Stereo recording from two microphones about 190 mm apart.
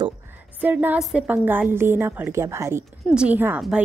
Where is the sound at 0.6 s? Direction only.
10° right (ahead or behind).